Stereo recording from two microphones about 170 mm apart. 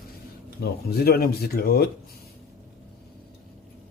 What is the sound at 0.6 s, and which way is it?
Speech, 70° left (ahead or behind).